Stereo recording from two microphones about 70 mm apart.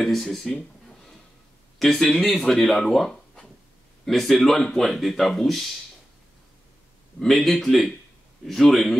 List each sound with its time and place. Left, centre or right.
0.0 s speech: centre
7.2 s speech: centre